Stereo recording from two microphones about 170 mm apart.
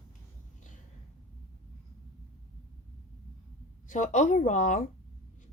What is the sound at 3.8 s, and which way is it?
Speech, 45° left (ahead or behind).